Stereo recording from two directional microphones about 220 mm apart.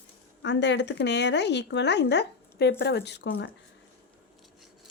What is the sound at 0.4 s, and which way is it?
Speech, 55° left (ahead or behind).